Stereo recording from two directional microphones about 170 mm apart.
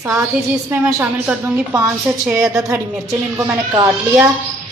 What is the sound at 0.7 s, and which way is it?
Speech, 10° right (ahead or behind).